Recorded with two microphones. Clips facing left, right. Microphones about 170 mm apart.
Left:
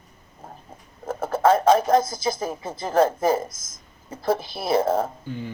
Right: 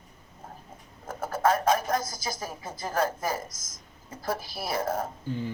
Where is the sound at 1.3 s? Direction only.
25° left (ahead or behind).